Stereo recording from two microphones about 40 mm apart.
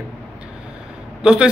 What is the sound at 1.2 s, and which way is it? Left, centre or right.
Speech, right.